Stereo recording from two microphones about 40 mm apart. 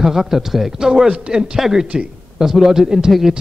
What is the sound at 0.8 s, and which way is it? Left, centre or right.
A man's voice, centre.